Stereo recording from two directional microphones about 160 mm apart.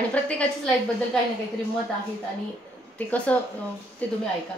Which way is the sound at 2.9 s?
10° left (ahead or behind).